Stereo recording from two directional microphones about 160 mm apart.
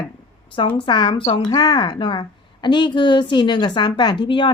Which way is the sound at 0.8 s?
30° left (ahead or behind).